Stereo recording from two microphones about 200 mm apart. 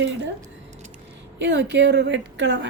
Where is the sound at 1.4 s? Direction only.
60° right (ahead or behind).